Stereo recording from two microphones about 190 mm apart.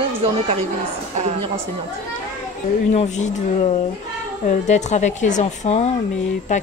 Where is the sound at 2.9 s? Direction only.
40° left (ahead or behind).